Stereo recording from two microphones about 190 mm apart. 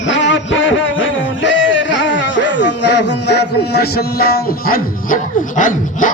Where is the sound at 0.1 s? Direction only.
75° left (ahead or behind).